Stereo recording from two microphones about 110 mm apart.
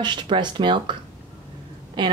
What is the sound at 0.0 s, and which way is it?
Speech, 45° right (ahead or behind).